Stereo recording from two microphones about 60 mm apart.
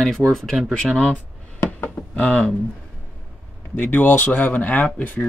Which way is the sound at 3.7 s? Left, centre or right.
Left.